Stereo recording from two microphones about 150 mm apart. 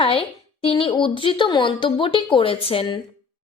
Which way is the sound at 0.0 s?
40° left (ahead or behind).